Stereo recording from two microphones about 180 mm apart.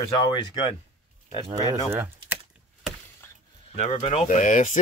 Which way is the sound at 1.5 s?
20° right (ahead or behind).